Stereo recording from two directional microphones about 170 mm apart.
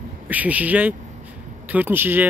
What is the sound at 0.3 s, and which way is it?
Speech, 10° right (ahead or behind).